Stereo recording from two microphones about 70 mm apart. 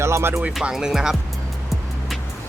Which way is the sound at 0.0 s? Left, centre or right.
Right.